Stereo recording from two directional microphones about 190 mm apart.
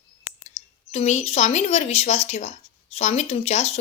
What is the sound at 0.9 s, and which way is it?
A woman's voice, 35° left (ahead or behind).